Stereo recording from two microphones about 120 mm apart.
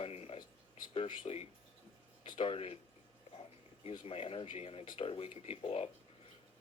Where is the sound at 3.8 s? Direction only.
55° left (ahead or behind).